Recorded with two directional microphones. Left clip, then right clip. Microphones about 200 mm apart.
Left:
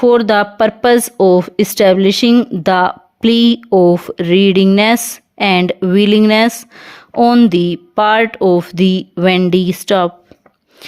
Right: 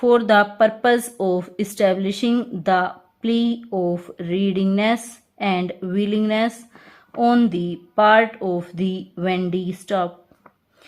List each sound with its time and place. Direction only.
0.0 s speech: 50° left (ahead or behind)